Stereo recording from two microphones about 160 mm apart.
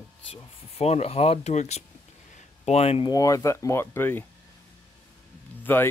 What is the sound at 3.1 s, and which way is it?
Speech, 20° left (ahead or behind).